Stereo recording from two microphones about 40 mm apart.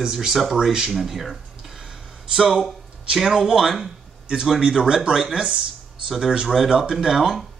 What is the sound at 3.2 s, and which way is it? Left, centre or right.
Speech, centre.